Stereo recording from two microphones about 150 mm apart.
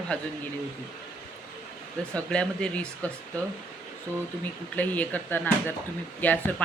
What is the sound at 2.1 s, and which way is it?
Speech, 5° left (ahead or behind).